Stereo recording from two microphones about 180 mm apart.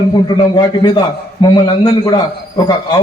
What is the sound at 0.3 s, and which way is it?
A man's voice, 25° left (ahead or behind).